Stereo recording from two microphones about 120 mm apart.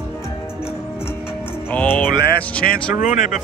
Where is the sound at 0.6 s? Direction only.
5° right (ahead or behind).